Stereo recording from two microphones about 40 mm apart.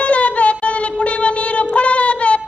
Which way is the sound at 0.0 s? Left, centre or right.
Left.